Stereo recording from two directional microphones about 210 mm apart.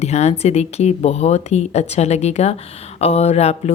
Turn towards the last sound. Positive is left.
turn(degrees=30)  # may be behind; listen again after turning